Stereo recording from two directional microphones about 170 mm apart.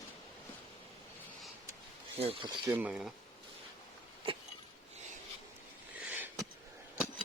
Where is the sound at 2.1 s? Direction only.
35° right (ahead or behind).